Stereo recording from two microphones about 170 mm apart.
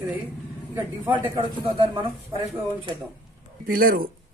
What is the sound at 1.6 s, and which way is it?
Speech, 30° right (ahead or behind).